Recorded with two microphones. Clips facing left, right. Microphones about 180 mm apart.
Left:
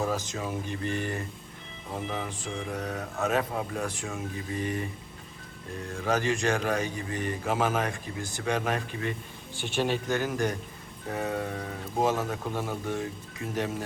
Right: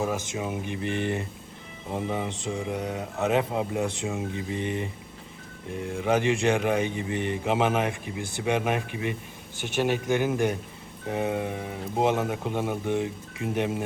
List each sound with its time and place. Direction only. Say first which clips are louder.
0.0 s speech: right 2 dB; 10° right (ahead or behind)
2.5 s speech: right 3 dB; 10° right (ahead or behind)